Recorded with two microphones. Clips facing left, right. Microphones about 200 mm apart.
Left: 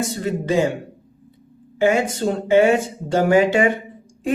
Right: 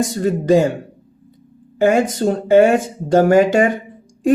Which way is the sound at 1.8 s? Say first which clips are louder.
Right 3 dB; 45° right (ahead or behind).